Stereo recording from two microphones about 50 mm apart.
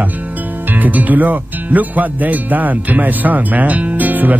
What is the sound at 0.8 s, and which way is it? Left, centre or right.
Speech, right.